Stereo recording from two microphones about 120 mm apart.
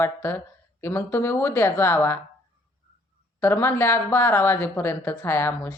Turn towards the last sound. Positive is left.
turn(degrees=20)  # may be behind; listen again after turning